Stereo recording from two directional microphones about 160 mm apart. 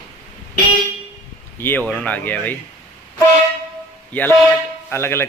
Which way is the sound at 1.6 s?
10° left (ahead or behind).